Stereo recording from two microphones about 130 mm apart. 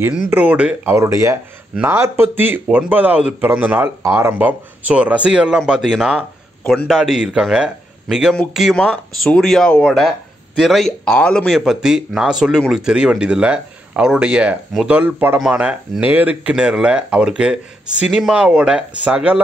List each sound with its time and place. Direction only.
0.3 s speech: 10° right (ahead or behind)
0.9 s speech: 20° right (ahead or behind); by 6.2 s 5° right (ahead or behind)
6.6 s a man's voice: 10° left (ahead or behind)
6.9 s speech: 5° right (ahead or behind)